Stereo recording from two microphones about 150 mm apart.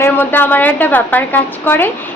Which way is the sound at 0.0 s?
15° left (ahead or behind).